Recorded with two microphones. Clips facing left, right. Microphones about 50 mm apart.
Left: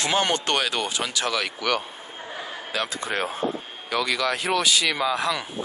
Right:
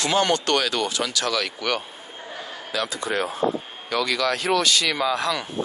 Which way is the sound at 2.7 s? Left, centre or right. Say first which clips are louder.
Right 2 dB; left.